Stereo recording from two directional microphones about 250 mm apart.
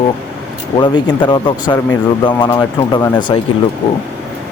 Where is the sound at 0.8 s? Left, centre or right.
Centre.